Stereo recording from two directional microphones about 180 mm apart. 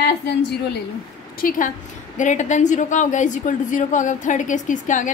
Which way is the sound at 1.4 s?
50° left (ahead or behind).